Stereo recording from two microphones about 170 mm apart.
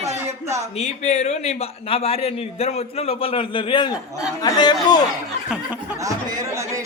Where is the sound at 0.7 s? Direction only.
40° left (ahead or behind); by 5.0 s 25° left (ahead or behind).